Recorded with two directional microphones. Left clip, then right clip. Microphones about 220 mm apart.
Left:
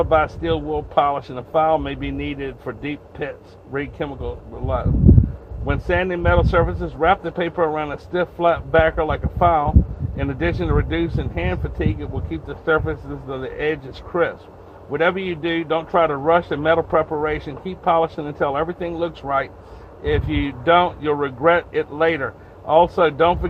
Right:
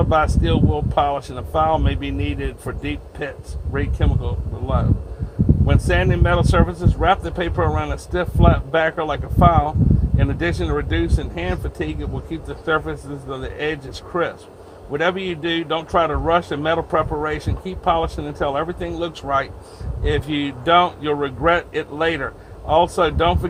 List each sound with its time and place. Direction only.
0.0 s speech: 20° right (ahead or behind)